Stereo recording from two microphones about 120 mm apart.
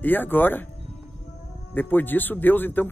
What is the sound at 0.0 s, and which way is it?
Speech, 15° left (ahead or behind).